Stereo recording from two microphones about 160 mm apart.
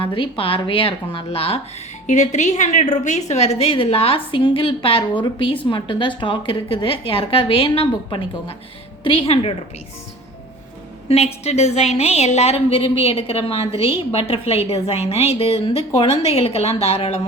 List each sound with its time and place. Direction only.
0.0 s a woman's voice: 35° left (ahead or behind)
2.0 s a woman's voice: 50° left (ahead or behind)
11.1 s a woman's voice: 40° left (ahead or behind)